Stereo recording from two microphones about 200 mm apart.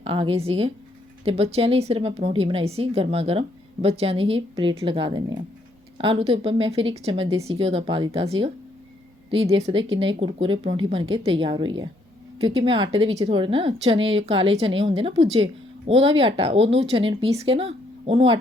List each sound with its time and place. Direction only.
0.0 s speech: 25° right (ahead or behind)